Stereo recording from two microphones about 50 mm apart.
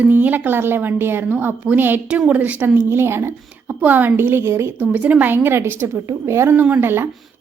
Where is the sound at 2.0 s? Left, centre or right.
Right.